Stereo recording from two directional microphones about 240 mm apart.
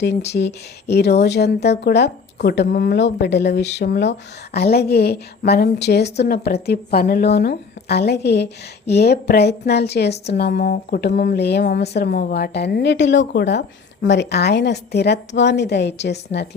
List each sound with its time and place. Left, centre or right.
0.3 s a woman's voice: left